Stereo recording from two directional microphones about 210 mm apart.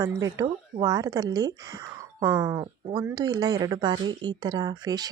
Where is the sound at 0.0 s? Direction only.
15° right (ahead or behind).